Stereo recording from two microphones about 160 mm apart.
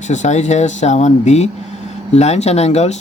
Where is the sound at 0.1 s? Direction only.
45° left (ahead or behind).